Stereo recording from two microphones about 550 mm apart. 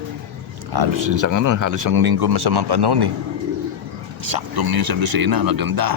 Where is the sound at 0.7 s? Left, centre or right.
Right.